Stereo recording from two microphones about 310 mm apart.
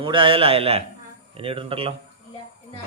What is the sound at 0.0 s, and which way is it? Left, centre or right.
A man's voice, centre.